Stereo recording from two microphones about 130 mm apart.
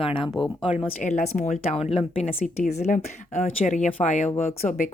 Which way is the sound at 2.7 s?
65° left (ahead or behind).